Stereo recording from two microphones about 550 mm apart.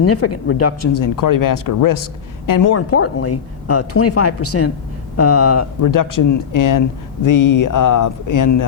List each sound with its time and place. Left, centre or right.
0.0 s speech: left
2.9 s speech: left